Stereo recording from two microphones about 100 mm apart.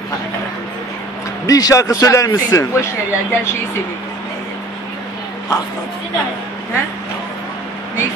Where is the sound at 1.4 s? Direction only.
35° left (ahead or behind).